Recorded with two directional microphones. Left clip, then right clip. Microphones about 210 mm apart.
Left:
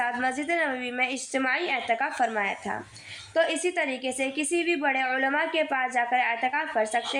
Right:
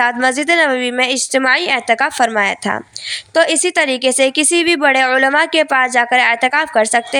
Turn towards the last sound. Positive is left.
turn(degrees=-45)  # may be behind; listen again after turning